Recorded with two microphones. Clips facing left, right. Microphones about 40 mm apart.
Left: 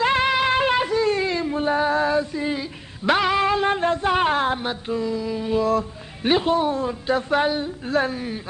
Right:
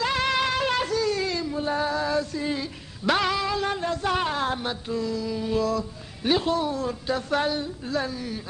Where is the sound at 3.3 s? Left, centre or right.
Left.